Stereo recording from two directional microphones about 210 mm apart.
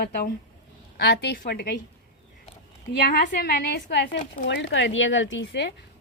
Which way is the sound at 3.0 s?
45° left (ahead or behind).